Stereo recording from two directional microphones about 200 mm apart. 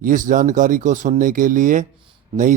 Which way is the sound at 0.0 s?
40° right (ahead or behind).